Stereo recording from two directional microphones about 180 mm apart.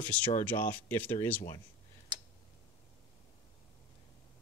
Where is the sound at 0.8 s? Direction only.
10° left (ahead or behind).